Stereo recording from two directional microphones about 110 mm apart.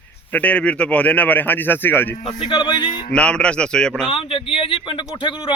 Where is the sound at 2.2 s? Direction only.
45° left (ahead or behind).